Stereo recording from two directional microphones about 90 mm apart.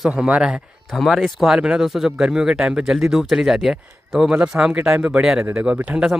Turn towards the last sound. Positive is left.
turn(degrees=-10)  # may be behind; listen again after turning